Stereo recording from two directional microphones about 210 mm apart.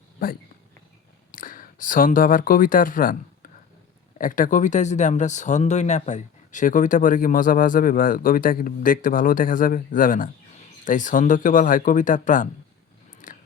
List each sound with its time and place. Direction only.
1.3 s speech: 40° left (ahead or behind)
4.2 s speech: 40° left (ahead or behind)
13.2 s biting: 40° left (ahead or behind)